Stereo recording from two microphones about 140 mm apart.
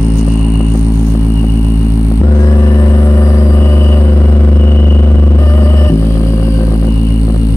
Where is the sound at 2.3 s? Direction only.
25° left (ahead or behind).